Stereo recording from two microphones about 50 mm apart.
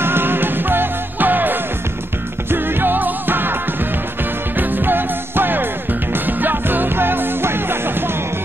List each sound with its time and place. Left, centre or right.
0.0 s music: right
4.6 s music: right